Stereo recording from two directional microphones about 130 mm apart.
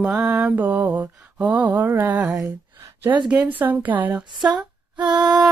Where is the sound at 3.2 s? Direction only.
10° right (ahead or behind).